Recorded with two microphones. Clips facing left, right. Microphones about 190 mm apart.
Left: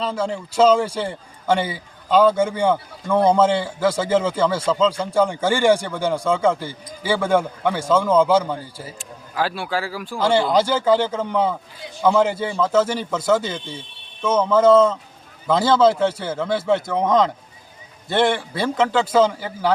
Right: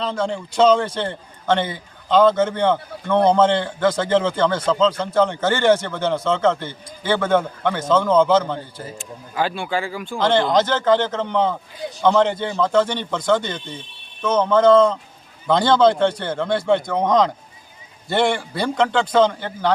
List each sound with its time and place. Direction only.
0.0 s a man's voice: 5° left (ahead or behind)